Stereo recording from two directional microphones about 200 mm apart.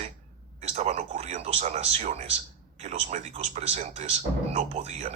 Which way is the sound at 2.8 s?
35° right (ahead or behind).